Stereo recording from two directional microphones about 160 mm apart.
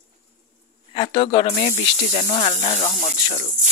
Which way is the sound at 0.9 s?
30° left (ahead or behind).